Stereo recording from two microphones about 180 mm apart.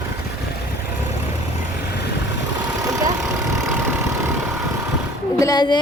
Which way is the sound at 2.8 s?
20° right (ahead or behind).